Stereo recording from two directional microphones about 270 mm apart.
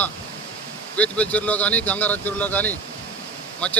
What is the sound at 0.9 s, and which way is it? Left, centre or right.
A man's voice, centre.